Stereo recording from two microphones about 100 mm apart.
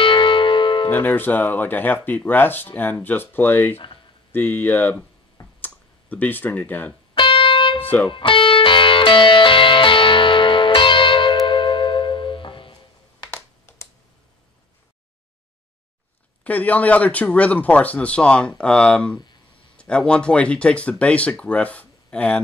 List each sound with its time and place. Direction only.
0.0 s music: 55° left (ahead or behind)
0.8 s speech: 20° left (ahead or behind)
4.3 s clicking: 20° left (ahead or behind)
7.2 s music: 60° left (ahead or behind)
7.8 s music: 20° left (ahead or behind)
8.1 s music: 60° left (ahead or behind)
13.7 s computer keyboard: 30° left (ahead or behind)
16.4 s speech: 15° left (ahead or behind)